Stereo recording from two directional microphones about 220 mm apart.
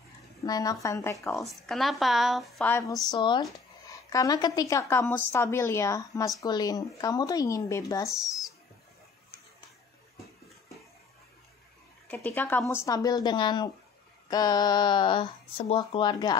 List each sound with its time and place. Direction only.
0.4 s a woman's voice: 15° left (ahead or behind)
1.3 s a woman's voice: centre (ahead or behind)
12.1 s a woman's voice: 10° left (ahead or behind)